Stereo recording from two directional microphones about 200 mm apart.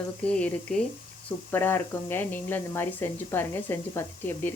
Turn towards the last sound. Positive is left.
turn(degrees=10)  # may be behind; listen again after turning